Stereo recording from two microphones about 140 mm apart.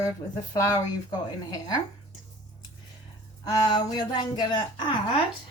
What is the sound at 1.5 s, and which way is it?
Speech, 25° left (ahead or behind).